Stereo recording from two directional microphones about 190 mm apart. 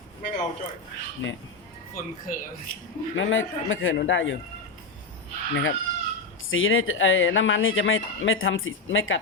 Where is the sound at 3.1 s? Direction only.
90° left.